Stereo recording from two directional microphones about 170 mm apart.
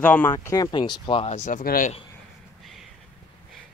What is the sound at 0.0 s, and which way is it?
Speech, 10° left (ahead or behind).